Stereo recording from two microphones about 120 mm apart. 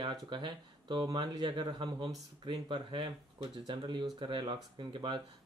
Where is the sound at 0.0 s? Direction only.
40° right (ahead or behind).